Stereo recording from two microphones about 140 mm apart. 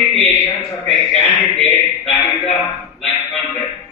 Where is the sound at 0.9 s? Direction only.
15° left (ahead or behind).